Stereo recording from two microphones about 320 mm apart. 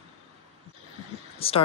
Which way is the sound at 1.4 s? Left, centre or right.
Centre.